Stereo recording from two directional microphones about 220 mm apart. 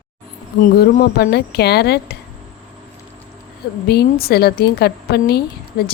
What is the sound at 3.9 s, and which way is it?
Speech, 45° left (ahead or behind).